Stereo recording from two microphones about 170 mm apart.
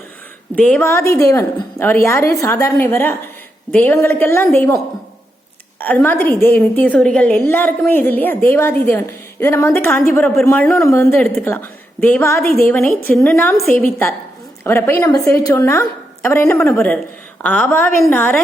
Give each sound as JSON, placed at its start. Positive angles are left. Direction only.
{"t": 0.8, "sound": "a woman's voice", "side_deg": 15}
{"t": 5.8, "sound": "a woman's voice", "side_deg": 10}